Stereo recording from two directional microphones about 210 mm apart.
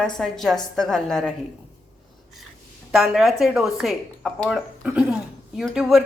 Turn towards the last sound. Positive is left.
turn(degrees=0)  # may be behind; listen again after turning